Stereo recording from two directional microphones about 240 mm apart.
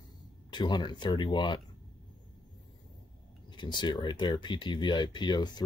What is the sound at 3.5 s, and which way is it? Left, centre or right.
Speech, centre.